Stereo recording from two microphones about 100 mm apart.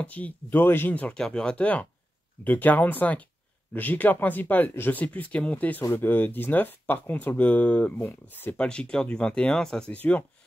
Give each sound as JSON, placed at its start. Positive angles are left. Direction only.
{"t": 0.0, "sound": "speech", "side_deg": 15}